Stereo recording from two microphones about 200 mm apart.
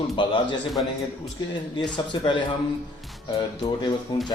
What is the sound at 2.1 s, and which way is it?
Speech, 25° left (ahead or behind).